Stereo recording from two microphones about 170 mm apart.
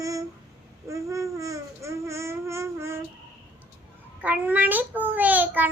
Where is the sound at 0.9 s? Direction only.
20° right (ahead or behind).